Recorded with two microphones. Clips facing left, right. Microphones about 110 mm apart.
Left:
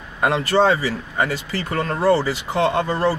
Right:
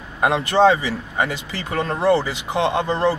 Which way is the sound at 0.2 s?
20° right (ahead or behind).